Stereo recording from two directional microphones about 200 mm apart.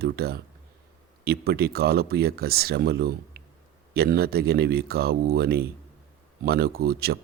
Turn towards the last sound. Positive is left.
turn(degrees=-50)  # may be behind; listen again after turning